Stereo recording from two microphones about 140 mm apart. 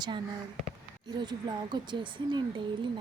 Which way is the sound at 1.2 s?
30° right (ahead or behind).